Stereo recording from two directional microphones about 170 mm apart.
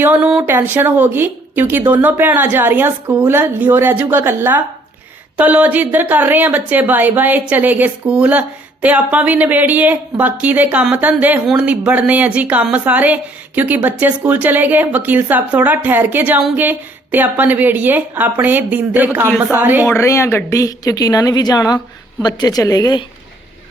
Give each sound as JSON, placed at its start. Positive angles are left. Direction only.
{"t": 0.0, "sound": "a woman's voice", "side_deg": -10}
{"t": 19.9, "sound": "speech", "side_deg": 15}